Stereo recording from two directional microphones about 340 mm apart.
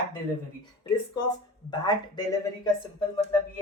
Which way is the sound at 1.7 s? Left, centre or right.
Centre.